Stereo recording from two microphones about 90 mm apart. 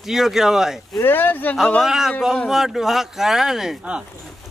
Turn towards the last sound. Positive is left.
turn(degrees=-10)  # may be behind; listen again after turning